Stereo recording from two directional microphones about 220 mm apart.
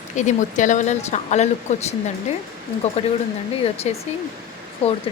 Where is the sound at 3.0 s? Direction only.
25° left (ahead or behind).